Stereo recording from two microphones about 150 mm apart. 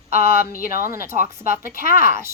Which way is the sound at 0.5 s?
70° left (ahead or behind).